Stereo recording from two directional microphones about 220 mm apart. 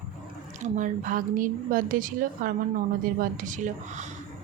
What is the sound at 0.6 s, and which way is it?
A woman's voice, 35° right (ahead or behind).